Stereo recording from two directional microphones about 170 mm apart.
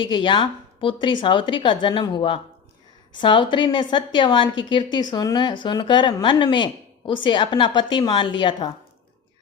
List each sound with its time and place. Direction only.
0.0 s a woman's voice: 30° left (ahead or behind)